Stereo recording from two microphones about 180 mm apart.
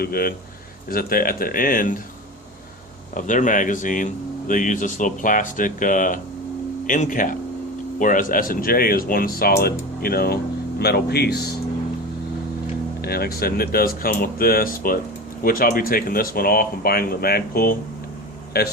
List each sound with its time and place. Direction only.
0.0 s speech: 55° left (ahead or behind)
3.2 s speech: 45° left (ahead or behind); by 11.5 s 60° left (ahead or behind)
13.0 s speech: 60° left (ahead or behind)